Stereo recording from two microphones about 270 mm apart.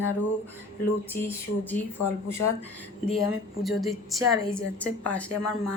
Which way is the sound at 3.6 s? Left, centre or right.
Centre.